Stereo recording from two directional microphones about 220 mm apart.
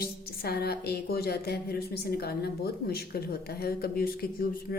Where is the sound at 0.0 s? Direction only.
45° left (ahead or behind).